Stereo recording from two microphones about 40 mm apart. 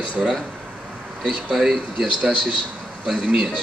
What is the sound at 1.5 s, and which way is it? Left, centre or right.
Speech, centre.